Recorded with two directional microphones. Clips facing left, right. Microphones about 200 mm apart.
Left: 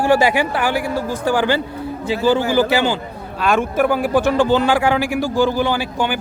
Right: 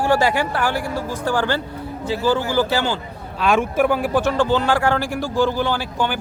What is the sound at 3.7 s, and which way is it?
Speech, 5° left (ahead or behind).